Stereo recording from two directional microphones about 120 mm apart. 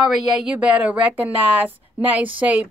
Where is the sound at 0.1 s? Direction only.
Centre (ahead or behind).